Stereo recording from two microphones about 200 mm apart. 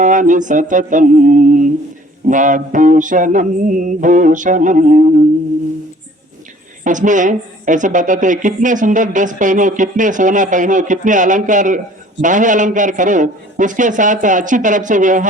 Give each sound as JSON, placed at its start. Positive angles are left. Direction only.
{"t": 0.0, "sound": "a woman's voice", "side_deg": -40}
{"t": 6.8, "sound": "a woman's voice", "side_deg": -40}